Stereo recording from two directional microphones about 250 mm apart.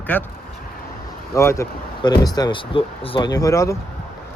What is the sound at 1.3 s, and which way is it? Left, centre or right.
Speech, centre.